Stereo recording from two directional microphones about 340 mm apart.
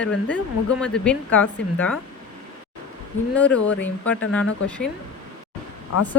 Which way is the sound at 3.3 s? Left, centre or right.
Centre.